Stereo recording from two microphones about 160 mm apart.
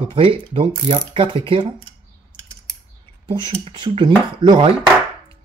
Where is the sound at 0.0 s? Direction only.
35° right (ahead or behind).